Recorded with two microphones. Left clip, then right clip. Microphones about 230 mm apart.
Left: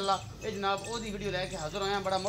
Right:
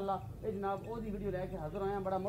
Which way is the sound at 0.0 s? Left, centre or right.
Centre.